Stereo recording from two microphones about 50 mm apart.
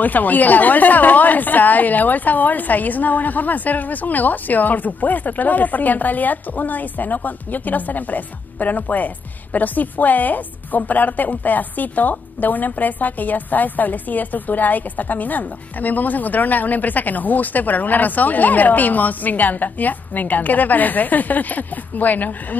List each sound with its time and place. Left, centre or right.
0.0 s a woman's voice: left